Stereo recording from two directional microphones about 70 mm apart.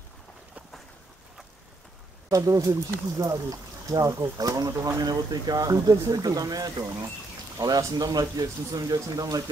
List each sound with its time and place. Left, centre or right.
2.2 s speech: right